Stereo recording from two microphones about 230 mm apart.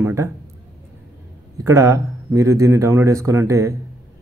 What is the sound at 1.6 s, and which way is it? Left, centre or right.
Speech, centre.